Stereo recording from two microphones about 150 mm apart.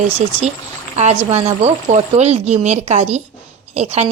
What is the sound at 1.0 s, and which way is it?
Speech, 45° right (ahead or behind).